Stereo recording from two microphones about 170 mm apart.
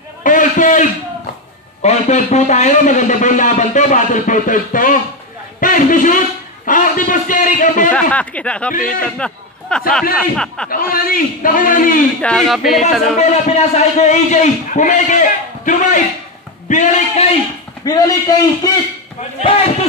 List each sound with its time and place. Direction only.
0.2 s a sound: 50° left (ahead or behind)
1.8 s a man's voice: 40° left (ahead or behind)
7.9 s speech: 10° left (ahead or behind)
8.7 s a man's voice: 55° left (ahead or behind)
9.2 s a sound: 5° left (ahead or behind)
10.3 s speech: 5° left (ahead or behind)
10.7 s a man's voice: 55° left (ahead or behind)
12.2 s speech: 5° left (ahead or behind)
13.0 s a man's voice: 40° left (ahead or behind)
17.8 s a man's voice: 20° left (ahead or behind)
19.4 s a man's voice: 35° left (ahead or behind)